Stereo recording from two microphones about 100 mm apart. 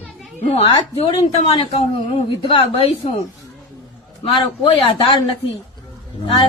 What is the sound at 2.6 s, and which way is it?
Speech, 75° left (ahead or behind).